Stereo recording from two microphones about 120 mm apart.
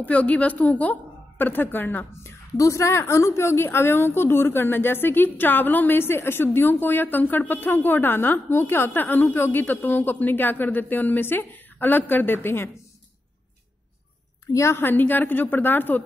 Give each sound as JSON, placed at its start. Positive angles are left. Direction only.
{"t": 0.0, "sound": "a woman's voice", "side_deg": 10}
{"t": 14.5, "sound": "a woman's voice", "side_deg": 25}